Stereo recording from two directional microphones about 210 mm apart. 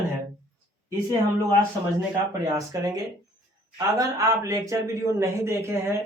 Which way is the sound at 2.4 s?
15° right (ahead or behind).